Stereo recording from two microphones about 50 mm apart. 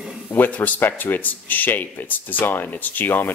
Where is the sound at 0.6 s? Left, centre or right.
Left.